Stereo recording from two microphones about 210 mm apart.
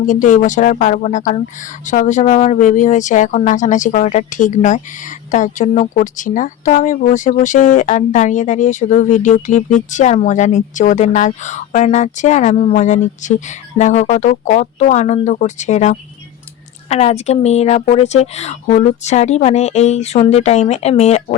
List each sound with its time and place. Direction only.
0.0 s speech: 40° left (ahead or behind)